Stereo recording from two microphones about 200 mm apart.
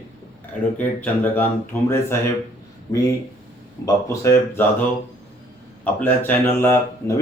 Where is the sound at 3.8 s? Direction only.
15° left (ahead or behind).